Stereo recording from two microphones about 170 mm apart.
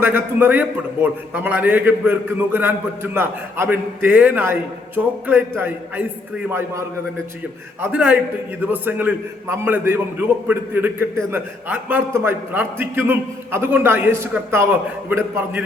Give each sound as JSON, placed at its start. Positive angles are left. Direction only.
{"t": 0.0, "sound": "a man's voice", "side_deg": -10}